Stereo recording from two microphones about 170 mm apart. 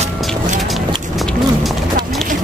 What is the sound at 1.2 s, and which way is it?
Run, centre (ahead or behind).